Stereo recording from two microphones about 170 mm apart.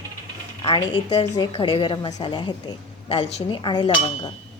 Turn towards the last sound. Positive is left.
turn(degrees=30)  # may be behind; listen again after turning